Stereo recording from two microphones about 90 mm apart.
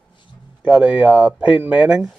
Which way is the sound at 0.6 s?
15° right (ahead or behind).